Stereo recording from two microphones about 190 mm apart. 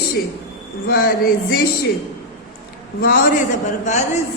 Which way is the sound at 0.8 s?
50° left (ahead or behind).